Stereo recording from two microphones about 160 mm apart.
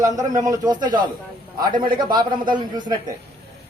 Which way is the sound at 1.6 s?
30° right (ahead or behind).